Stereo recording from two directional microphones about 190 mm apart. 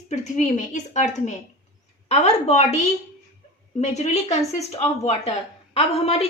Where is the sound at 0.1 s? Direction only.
40° left (ahead or behind).